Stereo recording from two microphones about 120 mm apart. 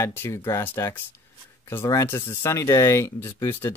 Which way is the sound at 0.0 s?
20° left (ahead or behind).